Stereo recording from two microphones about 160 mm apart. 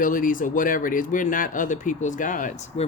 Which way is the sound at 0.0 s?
60° left (ahead or behind).